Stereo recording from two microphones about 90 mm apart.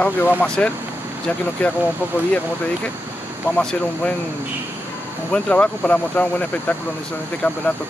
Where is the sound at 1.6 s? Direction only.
15° left (ahead or behind).